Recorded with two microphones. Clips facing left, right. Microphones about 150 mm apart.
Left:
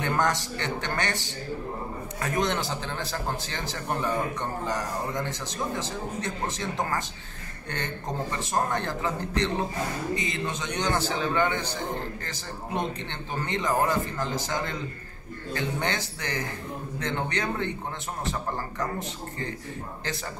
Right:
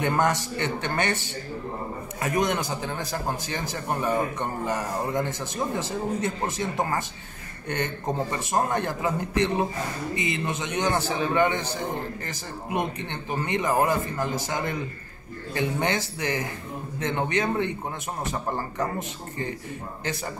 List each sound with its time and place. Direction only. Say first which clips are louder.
0.0 s a man's voice: right 2 dB; 20° right (ahead or behind)
6.6 s a man's voice: right 3 dB; 20° right (ahead or behind)